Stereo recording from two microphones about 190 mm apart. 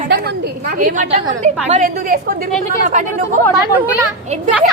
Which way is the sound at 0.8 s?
45° right (ahead or behind).